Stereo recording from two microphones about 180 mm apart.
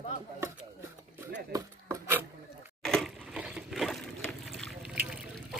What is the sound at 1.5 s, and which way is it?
Wood, 15° right (ahead or behind).